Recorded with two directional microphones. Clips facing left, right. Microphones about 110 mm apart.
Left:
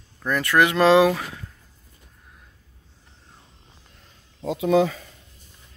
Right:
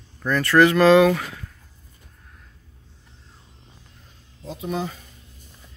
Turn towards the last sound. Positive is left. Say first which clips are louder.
# left 9 dB
turn(degrees=90)